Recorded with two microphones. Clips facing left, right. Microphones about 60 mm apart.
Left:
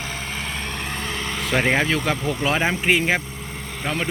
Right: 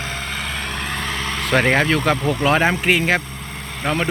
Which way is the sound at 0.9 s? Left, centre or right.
Right.